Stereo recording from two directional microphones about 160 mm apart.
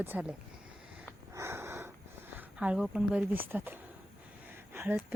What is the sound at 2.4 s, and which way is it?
Speech, 5° right (ahead or behind).